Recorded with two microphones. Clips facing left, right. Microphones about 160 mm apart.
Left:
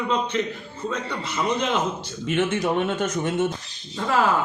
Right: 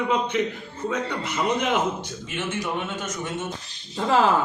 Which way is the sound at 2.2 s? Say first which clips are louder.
Left 8 dB; 60° left (ahead or behind).